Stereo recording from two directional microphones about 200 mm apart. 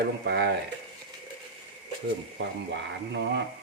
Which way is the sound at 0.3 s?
55° right (ahead or behind).